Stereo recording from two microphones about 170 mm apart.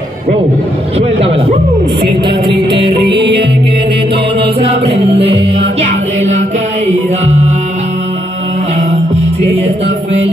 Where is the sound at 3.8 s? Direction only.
30° right (ahead or behind).